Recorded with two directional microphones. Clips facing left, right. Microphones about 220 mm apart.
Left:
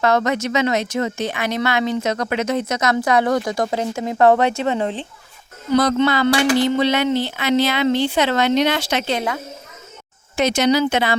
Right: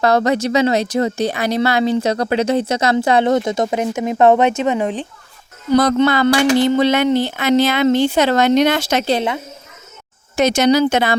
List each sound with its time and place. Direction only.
0.0 s speech: 35° right (ahead or behind); by 5.0 s 15° right (ahead or behind)
5.7 s speech: 45° right (ahead or behind)
10.3 s speech: 45° right (ahead or behind)